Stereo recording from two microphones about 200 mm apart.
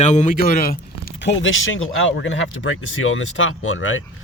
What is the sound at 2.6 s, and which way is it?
Speech, 85° left.